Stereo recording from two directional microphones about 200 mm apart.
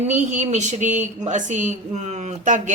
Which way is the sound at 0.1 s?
35° right (ahead or behind).